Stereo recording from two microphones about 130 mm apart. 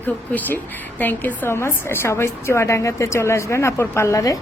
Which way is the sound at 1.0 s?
15° left (ahead or behind).